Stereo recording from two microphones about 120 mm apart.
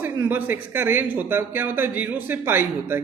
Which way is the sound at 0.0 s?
15° right (ahead or behind).